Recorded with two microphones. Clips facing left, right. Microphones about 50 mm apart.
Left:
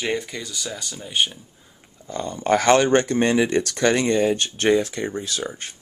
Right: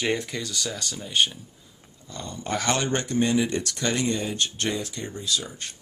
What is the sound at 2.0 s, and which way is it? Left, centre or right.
Speech, left.